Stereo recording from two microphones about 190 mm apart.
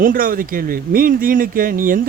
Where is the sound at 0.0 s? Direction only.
45° right (ahead or behind).